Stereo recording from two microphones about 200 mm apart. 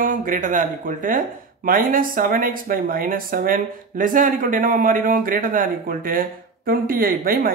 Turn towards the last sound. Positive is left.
turn(degrees=-45)  # may be behind; listen again after turning